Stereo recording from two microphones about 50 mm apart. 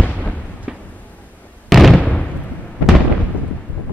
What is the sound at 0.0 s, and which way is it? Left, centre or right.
Fireworks, left.